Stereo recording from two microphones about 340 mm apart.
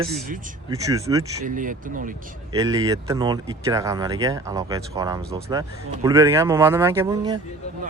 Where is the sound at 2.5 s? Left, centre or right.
Centre.